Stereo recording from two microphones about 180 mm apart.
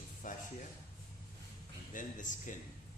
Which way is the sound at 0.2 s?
45° left (ahead or behind).